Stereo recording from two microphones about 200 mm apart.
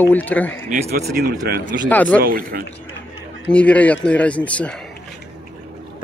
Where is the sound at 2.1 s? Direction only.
45° right (ahead or behind).